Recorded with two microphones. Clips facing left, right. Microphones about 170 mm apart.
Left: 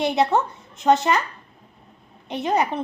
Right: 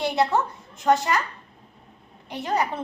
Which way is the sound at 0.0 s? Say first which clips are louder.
Left 2 dB; 20° left (ahead or behind).